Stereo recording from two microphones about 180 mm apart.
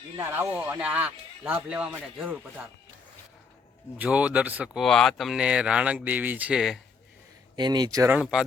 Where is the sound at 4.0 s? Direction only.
5° right (ahead or behind).